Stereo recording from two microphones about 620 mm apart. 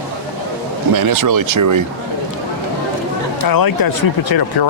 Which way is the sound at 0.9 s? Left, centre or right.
Right.